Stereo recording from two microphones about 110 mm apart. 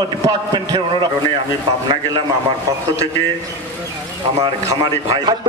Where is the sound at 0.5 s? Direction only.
40° right (ahead or behind).